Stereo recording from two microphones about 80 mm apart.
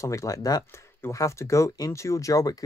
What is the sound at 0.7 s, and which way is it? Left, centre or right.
Speech, left.